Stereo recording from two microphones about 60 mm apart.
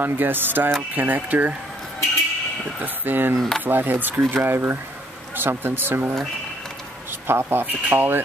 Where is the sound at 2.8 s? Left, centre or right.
Right.